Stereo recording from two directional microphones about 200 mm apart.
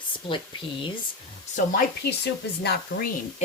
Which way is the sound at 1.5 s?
45° left (ahead or behind).